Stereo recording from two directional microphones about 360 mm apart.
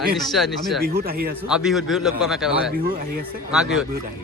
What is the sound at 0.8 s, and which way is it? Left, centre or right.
Speech, right.